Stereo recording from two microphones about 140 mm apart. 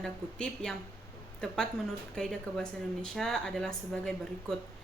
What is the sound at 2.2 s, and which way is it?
Speech, 5° left (ahead or behind).